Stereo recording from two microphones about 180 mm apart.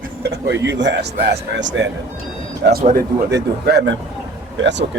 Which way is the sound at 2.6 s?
55° right (ahead or behind).